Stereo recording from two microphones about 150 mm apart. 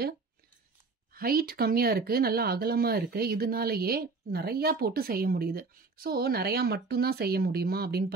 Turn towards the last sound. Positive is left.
turn(degrees=-90)